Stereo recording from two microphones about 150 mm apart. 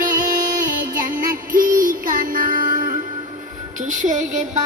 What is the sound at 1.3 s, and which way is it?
Music, 65° right (ahead or behind).